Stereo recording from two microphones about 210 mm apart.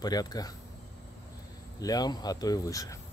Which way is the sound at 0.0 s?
20° left (ahead or behind).